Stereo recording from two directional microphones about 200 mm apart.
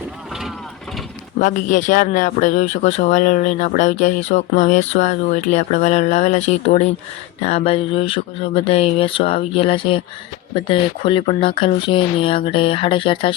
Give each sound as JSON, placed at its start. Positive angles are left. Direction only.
{"t": 1.4, "sound": "speech", "side_deg": 40}